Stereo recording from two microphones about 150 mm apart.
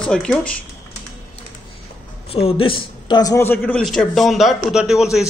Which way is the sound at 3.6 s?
Centre (ahead or behind).